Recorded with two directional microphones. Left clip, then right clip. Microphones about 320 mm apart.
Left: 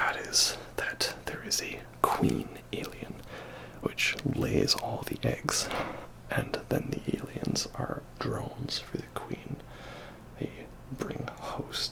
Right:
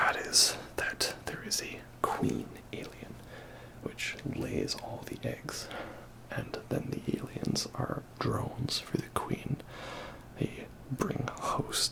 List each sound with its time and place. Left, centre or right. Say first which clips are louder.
0.0 s whispering: right 1 dB; right; by 1.8 s centre
2.0 s whispering: left 5 dB; centre; by 5.9 s left
6.2 s whispering: left 6 dB; left; by 9.4 s right
9.8 s a sound: right 3 dB; right